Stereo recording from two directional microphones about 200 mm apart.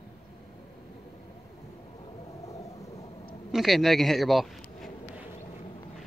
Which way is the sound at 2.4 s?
15° left (ahead or behind).